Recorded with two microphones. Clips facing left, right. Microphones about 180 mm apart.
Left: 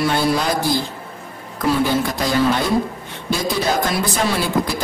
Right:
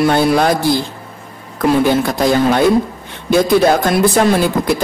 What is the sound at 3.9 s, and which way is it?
Speech, 50° right (ahead or behind).